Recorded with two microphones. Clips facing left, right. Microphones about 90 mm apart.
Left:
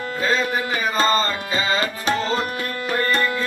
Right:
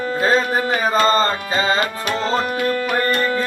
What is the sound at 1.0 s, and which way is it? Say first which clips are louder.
Tabla: right 4 dB; 35° right (ahead or behind).